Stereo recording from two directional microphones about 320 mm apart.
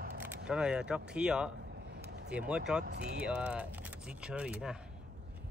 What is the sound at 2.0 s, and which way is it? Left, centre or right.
Vehicle, right.